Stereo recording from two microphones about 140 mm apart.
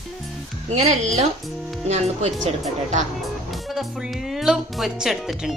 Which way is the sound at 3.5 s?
Centre (ahead or behind).